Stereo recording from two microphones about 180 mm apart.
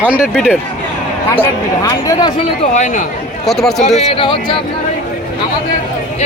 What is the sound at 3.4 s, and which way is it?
Speech, centre (ahead or behind).